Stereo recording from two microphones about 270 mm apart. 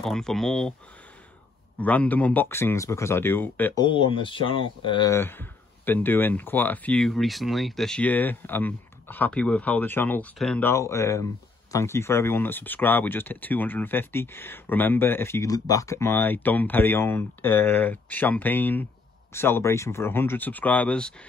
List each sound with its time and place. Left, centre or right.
0.0 s speech: centre
1.8 s speech: centre